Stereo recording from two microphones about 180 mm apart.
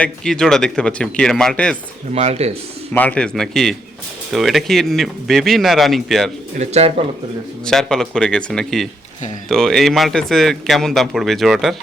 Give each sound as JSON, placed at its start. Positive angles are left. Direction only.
{"t": 0.0, "sound": "speech", "side_deg": 5}
{"t": 2.1, "sound": "speech", "side_deg": -35}
{"t": 2.9, "sound": "speech", "side_deg": 10}
{"t": 6.6, "sound": "speech", "side_deg": -35}
{"t": 7.6, "sound": "speech", "side_deg": 5}